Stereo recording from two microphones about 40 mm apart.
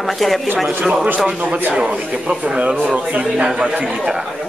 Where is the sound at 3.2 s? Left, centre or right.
Centre.